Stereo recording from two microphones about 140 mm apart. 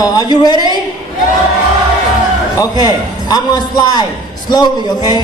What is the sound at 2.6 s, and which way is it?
A man's voice, 30° left (ahead or behind).